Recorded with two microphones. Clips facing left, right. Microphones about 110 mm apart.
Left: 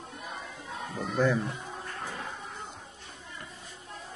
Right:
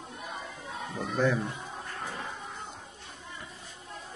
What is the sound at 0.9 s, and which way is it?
Speech, centre (ahead or behind).